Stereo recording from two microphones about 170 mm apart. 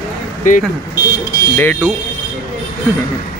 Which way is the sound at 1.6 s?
15° left (ahead or behind).